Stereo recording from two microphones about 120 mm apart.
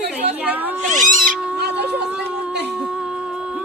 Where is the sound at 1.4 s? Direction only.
10° right (ahead or behind).